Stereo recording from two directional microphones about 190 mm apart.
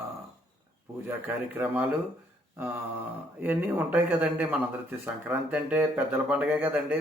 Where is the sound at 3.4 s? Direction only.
10° right (ahead or behind).